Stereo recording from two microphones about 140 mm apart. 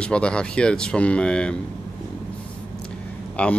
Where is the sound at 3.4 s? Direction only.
10° left (ahead or behind).